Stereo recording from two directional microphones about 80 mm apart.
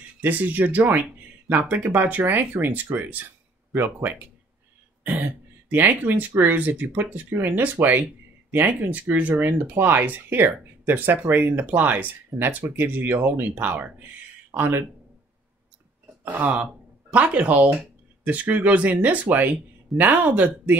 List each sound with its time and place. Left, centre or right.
0.2 s speech: right
16.3 s speech: right